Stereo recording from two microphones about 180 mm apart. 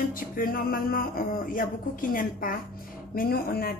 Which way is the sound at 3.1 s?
55° left (ahead or behind).